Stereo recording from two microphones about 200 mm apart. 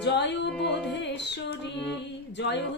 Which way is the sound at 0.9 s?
60° left (ahead or behind).